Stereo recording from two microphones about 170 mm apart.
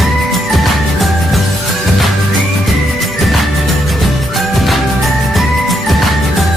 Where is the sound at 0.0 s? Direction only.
Centre (ahead or behind).